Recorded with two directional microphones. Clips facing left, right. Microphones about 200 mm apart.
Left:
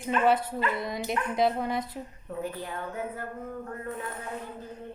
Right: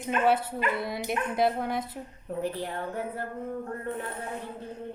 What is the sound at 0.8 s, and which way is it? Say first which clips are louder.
Speech: even; 5° right (ahead or behind).